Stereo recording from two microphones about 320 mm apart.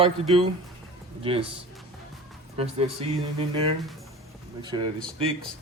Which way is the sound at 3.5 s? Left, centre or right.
Centre.